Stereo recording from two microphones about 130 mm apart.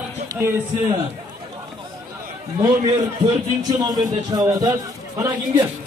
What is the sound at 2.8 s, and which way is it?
A man's voice, 35° right (ahead or behind).